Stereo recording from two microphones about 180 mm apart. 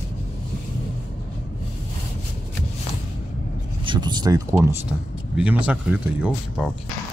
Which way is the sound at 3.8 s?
25° right (ahead or behind).